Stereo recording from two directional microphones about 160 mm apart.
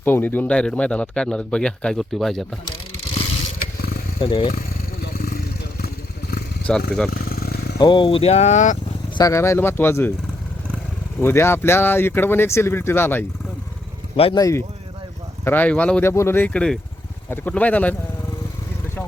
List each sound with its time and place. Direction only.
0.0 s speech: 10° left (ahead or behind)
3.6 s wild animals: 75° left (ahead or behind)
4.2 s speech: 35° left (ahead or behind)
5.1 s vehicle: 70° left (ahead or behind)
6.7 s speech: 5° left (ahead or behind)
7.1 s motorcycle: 65° left (ahead or behind)
7.8 s speech: 30° left (ahead or behind); by 8.8 s 50° left (ahead or behind)
9.1 s speech: 20° left (ahead or behind)
11.2 s speech: 15° left (ahead or behind)
14.3 s speech: 20° left (ahead or behind)
15.4 s speech: 10° left (ahead or behind)